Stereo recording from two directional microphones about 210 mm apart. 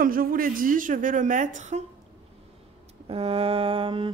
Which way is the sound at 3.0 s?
25° right (ahead or behind).